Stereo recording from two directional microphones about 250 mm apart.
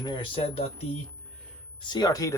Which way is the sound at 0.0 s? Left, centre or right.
Left.